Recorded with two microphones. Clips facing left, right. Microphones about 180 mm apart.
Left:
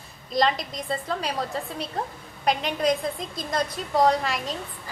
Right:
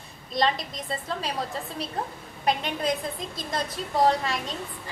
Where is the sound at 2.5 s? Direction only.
Centre (ahead or behind).